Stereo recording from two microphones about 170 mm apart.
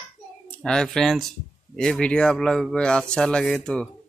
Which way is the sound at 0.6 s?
5° left (ahead or behind).